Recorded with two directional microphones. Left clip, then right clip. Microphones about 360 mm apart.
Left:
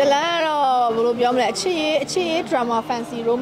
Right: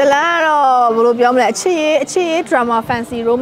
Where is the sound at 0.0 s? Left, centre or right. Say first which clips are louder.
Right 6 dB; right.